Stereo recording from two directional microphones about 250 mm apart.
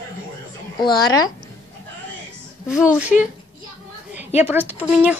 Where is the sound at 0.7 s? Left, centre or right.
Centre.